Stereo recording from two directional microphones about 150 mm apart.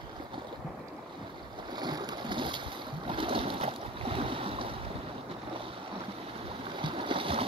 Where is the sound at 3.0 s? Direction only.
35° right (ahead or behind).